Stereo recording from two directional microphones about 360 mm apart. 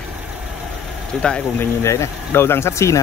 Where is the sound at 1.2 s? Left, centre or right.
Centre.